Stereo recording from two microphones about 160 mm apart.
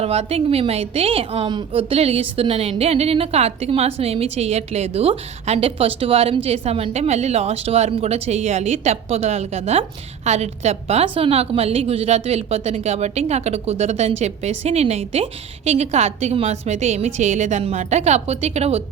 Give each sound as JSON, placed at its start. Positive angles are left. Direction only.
{"t": 0.0, "sound": "a woman's voice", "side_deg": -40}